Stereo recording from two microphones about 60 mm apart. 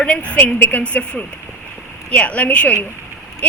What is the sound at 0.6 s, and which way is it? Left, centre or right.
A man's voice, left.